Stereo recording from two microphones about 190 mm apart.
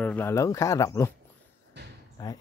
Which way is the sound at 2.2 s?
20° left (ahead or behind).